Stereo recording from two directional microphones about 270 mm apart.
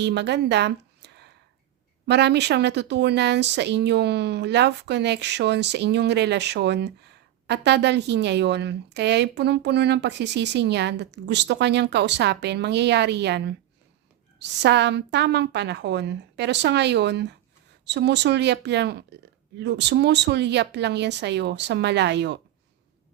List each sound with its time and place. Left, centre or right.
0.0 s a woman's voice: right